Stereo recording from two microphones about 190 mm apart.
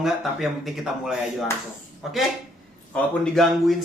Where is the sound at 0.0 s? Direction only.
Centre (ahead or behind).